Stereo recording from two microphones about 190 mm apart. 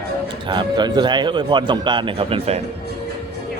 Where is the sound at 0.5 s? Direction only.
25° right (ahead or behind).